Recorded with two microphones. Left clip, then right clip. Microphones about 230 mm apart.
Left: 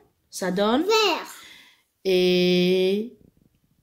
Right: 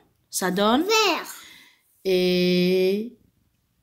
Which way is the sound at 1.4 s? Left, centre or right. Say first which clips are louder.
Even; centre.